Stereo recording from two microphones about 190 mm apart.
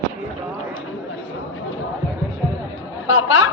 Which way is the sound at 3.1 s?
90° left.